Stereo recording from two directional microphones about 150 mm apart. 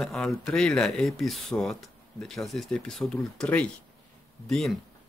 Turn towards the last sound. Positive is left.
turn(degrees=0)  # may be behind; listen again after turning